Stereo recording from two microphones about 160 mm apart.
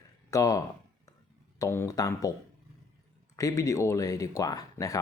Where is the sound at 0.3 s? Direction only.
20° left (ahead or behind).